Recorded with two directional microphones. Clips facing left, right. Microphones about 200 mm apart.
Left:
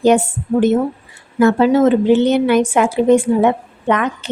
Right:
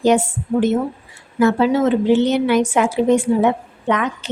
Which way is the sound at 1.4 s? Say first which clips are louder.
Left 3 dB; 50° left (ahead or behind).